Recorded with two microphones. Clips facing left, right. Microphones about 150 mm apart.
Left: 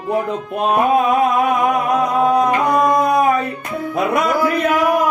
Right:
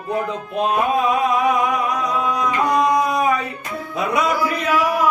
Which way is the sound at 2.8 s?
55° left (ahead or behind).